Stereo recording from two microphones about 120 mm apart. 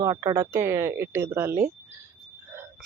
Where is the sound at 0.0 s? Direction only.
30° right (ahead or behind).